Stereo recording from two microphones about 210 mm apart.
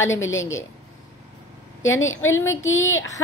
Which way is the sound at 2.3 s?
15° left (ahead or behind).